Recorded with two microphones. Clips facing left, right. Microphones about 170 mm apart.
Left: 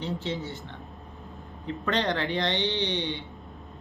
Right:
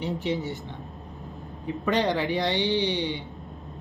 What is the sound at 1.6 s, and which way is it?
Speech, 15° right (ahead or behind).